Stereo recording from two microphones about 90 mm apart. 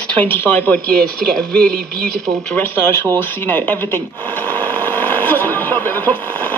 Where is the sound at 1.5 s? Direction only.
10° left (ahead or behind).